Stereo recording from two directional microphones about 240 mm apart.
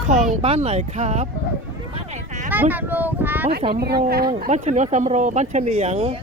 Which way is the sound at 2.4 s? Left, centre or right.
Centre.